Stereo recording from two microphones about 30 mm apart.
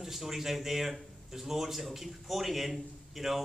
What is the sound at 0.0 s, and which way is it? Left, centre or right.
A man's voice, centre.